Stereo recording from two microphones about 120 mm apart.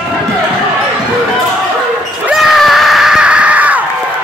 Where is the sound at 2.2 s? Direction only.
5° right (ahead or behind).